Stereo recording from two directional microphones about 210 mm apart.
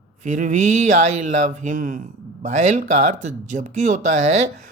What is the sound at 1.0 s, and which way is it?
A man's voice, 35° right (ahead or behind).